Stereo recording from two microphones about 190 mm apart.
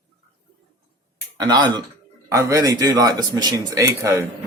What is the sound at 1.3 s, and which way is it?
Speech, 20° right (ahead or behind).